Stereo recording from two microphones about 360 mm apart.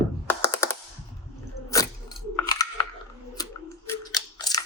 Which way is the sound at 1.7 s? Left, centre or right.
Centre.